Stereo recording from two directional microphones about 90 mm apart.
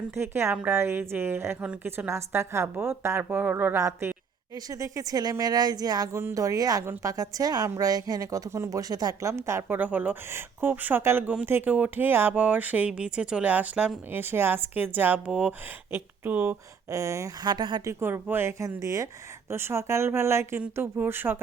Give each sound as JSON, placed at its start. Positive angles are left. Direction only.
{"t": 0.1, "sound": "a woman's voice", "side_deg": -30}
{"t": 6.1, "sound": "a woman's voice", "side_deg": -30}
{"t": 9.3, "sound": "a woman's voice", "side_deg": -30}
{"t": 16.9, "sound": "a woman's voice", "side_deg": -35}
{"t": 17.4, "sound": "a woman's voice", "side_deg": -55}
{"t": 18.0, "sound": "a woman's voice", "side_deg": -25}
{"t": 18.8, "sound": "a woman's voice", "side_deg": -35}